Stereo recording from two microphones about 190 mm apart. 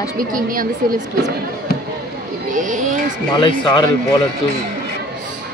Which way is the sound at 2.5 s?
40° right (ahead or behind).